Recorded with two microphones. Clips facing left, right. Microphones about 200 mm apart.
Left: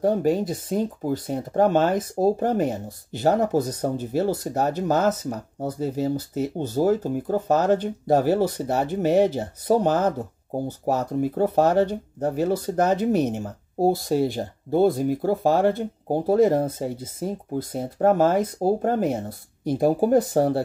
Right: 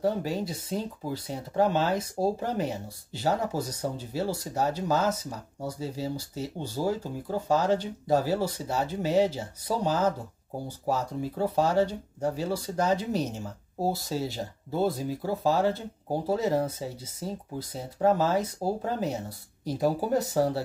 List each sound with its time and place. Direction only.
0.0 s speech: 50° left (ahead or behind)